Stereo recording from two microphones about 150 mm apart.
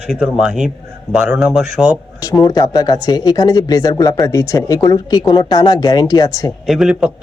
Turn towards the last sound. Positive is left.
turn(degrees=-5)  # may be behind; listen again after turning